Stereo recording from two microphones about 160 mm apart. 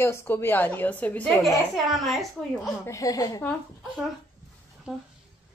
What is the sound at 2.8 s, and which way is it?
Speech, 20° left (ahead or behind).